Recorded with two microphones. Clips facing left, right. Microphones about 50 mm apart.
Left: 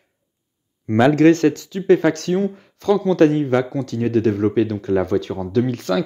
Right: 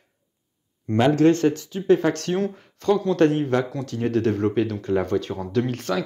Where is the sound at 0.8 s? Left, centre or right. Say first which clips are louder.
Left 4 dB; left.